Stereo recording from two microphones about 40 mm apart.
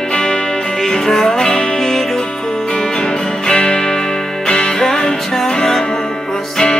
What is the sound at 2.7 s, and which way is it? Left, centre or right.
Music, left.